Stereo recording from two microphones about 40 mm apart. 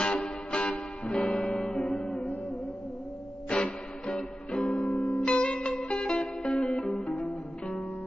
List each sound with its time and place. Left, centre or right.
0.5 s music: left
3.5 s music: left